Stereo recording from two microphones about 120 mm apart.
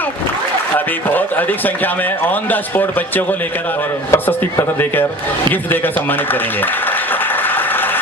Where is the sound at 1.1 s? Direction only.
15° left (ahead or behind).